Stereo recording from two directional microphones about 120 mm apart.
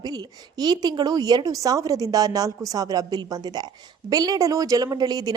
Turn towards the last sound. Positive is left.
turn(degrees=-35)  # may be behind; listen again after turning